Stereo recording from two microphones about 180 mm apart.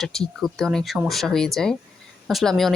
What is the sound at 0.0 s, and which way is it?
Speech, centre (ahead or behind).